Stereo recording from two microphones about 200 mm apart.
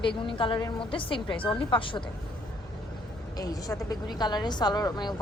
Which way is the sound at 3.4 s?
20° left (ahead or behind).